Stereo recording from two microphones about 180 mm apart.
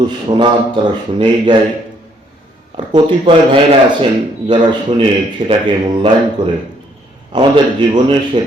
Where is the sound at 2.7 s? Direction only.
25° right (ahead or behind).